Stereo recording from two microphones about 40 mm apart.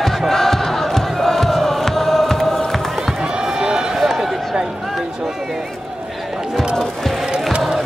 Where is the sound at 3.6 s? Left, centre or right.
Centre.